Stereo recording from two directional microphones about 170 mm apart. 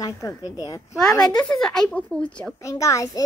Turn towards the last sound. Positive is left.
turn(degrees=20)  # may be behind; listen again after turning